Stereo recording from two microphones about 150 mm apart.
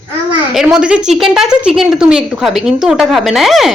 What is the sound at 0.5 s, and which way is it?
A woman's voice, 5° right (ahead or behind).